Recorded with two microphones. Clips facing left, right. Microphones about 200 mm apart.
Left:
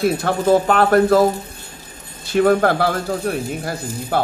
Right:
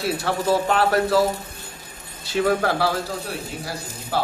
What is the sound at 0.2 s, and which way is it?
Speech, 50° left (ahead or behind).